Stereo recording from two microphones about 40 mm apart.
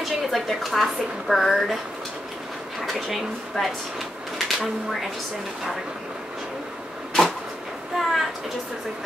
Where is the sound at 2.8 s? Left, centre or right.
Centre.